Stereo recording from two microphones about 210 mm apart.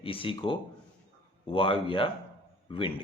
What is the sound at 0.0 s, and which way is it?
Speech, 25° left (ahead or behind).